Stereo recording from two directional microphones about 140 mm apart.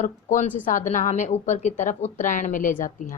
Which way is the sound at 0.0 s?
65° left (ahead or behind).